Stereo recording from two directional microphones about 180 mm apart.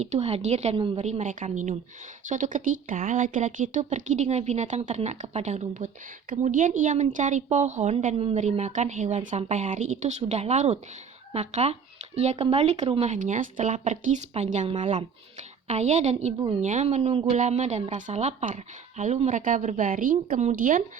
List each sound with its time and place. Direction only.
0.0 s a woman's voice: 35° right (ahead or behind)